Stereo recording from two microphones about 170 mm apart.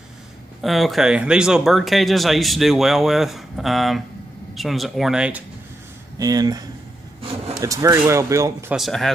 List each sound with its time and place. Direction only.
0.6 s speech: centre (ahead or behind)
6.1 s speech: 20° right (ahead or behind)
7.6 s speech: 20° right (ahead or behind)
8.7 s speech: centre (ahead or behind)